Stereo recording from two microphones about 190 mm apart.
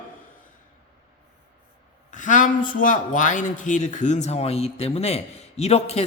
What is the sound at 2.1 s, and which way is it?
A man's voice, 40° left (ahead or behind).